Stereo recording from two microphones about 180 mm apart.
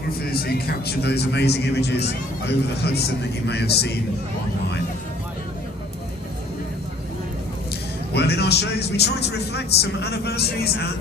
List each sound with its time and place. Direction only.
0.2 s a man's voice: 60° left (ahead or behind)
8.1 s a man's voice: 65° left (ahead or behind)